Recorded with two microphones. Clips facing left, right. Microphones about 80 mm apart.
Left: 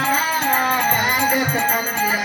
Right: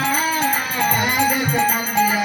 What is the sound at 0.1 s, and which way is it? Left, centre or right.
Music, left.